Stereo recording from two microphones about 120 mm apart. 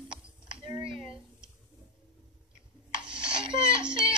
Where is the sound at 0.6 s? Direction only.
45° right (ahead or behind).